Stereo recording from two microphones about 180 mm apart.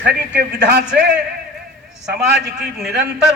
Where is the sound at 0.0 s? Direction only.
65° right (ahead or behind).